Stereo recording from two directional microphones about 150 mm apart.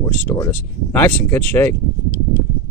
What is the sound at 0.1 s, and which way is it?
Speech, 10° left (ahead or behind).